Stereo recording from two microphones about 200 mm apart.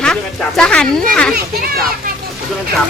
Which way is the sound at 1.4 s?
50° right (ahead or behind).